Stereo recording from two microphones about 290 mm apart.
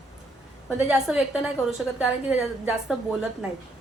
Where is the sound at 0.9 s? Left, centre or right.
Centre.